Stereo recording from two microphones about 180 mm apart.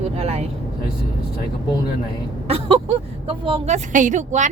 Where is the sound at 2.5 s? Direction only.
30° right (ahead or behind).